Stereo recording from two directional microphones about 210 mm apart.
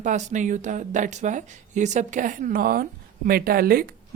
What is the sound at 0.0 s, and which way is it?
A woman's voice, 35° right (ahead or behind).